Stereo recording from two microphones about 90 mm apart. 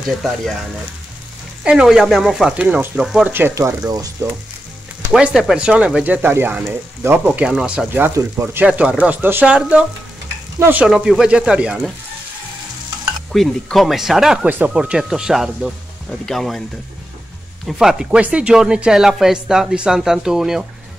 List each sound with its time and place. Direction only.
1.6 s speech: 10° right (ahead or behind)
2.5 s speech: 15° right (ahead or behind)
3.3 s speech: 25° right (ahead or behind)
3.5 s speech: 40° right (ahead or behind)
5.1 s speech: 5° right (ahead or behind)
6.0 s speech: 20° right (ahead or behind)
7.4 s speech: 10° right (ahead or behind)
8.1 s speech: 35° right (ahead or behind)
8.5 s speech: 15° right (ahead or behind)
10.9 s speech: 5° right (ahead or behind)
13.3 s speech: centre (ahead or behind)
14.4 s speech: 15° right (ahead or behind); by 16.6 s 5° left (ahead or behind)
17.6 s speech: 5° right (ahead or behind)